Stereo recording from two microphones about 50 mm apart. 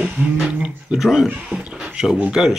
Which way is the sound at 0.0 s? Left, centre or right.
Centre.